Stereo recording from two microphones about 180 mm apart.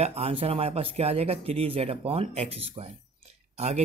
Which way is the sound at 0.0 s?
35° right (ahead or behind).